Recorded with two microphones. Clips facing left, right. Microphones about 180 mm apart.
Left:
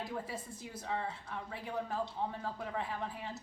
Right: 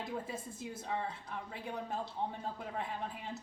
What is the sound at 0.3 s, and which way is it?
A woman's voice, 25° right (ahead or behind).